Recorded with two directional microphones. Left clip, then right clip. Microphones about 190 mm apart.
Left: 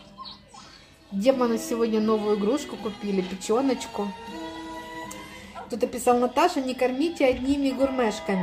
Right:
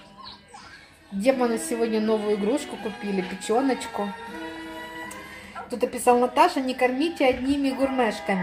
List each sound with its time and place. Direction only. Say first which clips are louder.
1.2 s a woman's voice: even; 5° left (ahead or behind)
5.7 s a woman's voice: right 2 dB; centre (ahead or behind)